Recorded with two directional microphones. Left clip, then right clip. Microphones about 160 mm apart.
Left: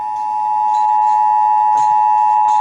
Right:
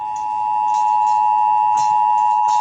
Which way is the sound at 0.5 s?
20° left (ahead or behind).